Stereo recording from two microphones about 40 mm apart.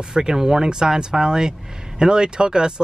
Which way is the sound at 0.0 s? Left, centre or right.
Centre.